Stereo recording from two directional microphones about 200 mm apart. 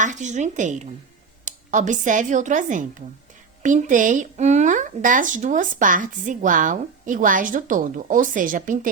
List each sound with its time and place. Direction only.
0.0 s speech: 40° right (ahead or behind)